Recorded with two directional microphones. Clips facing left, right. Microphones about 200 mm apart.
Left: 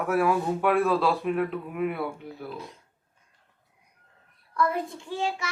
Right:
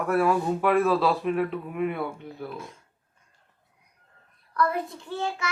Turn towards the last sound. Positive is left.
turn(degrees=15)  # may be behind; listen again after turning